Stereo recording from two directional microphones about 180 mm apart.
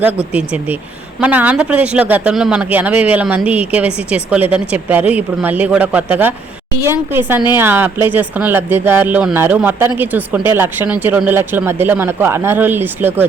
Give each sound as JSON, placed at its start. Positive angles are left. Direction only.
{"t": 0.0, "sound": "speech", "side_deg": -5}